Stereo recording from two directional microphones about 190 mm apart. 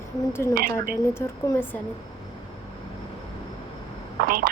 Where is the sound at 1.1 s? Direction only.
15° left (ahead or behind).